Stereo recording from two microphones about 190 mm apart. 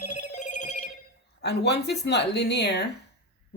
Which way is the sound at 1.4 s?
60° left (ahead or behind).